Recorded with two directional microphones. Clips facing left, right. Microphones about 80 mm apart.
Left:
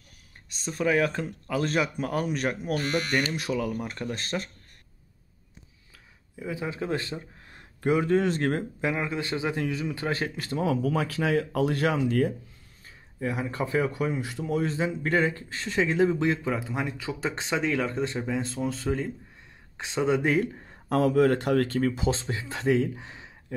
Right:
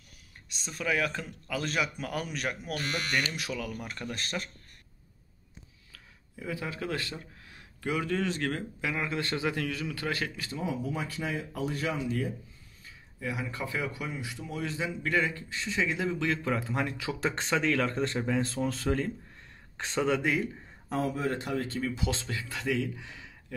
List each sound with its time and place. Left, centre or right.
0.6 s speech: left
5.9 s speech: centre
7.4 s speech: left
8.9 s speech: centre; by 10.4 s left
10.6 s speech: left
12.8 s speech: left
16.4 s speech: centre
20.9 s speech: left
22.0 s speech: left